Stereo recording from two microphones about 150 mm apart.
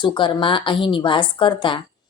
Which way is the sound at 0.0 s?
30° left (ahead or behind).